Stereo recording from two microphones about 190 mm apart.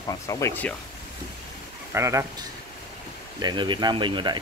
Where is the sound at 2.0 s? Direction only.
15° right (ahead or behind).